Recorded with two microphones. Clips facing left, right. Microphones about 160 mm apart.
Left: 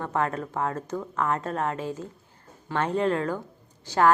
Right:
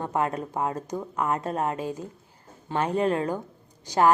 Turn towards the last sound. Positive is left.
turn(degrees=-15)  # may be behind; listen again after turning